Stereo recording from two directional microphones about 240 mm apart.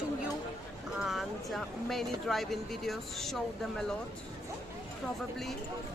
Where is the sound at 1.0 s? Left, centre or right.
Centre.